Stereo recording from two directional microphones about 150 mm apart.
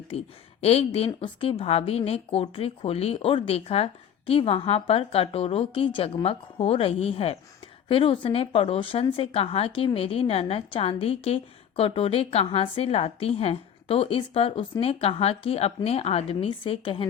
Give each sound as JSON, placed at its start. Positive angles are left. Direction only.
{"t": 0.1, "sound": "a woman's voice", "side_deg": 40}